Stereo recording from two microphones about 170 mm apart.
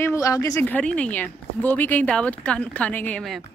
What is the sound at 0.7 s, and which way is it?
Speech, 10° left (ahead or behind).